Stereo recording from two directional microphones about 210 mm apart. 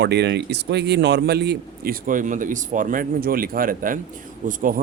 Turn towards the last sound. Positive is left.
turn(degrees=-40)  # may be behind; listen again after turning